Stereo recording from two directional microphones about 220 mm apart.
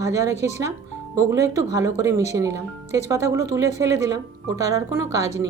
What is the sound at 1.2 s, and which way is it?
Speech, 15° right (ahead or behind).